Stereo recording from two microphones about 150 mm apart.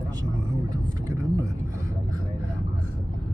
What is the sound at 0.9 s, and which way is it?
Vehicle, 25° right (ahead or behind).